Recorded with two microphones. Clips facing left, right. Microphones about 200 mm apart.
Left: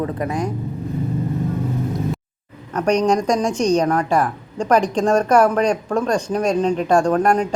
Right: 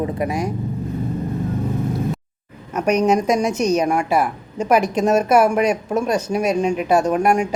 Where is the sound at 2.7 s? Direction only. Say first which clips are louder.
Even; 10° right (ahead or behind).